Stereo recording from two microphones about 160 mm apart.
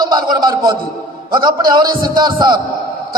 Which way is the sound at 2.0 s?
25° right (ahead or behind).